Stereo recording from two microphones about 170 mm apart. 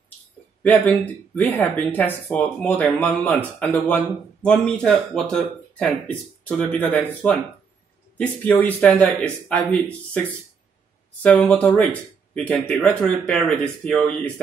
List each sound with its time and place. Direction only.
1.3 s speech: 10° left (ahead or behind)
8.5 s speech: 15° left (ahead or behind)
11.2 s speech: 10° left (ahead or behind)